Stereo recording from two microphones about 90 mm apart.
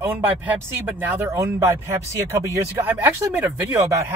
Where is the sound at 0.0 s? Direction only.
25° right (ahead or behind).